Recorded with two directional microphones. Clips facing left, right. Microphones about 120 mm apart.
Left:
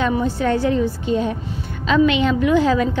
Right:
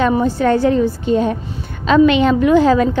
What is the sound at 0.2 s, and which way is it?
A woman's voice, 50° right (ahead or behind).